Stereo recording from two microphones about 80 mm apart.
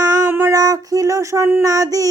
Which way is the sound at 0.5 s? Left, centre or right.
Right.